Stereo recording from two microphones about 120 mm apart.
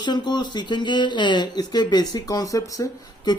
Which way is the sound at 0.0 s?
40° left (ahead or behind).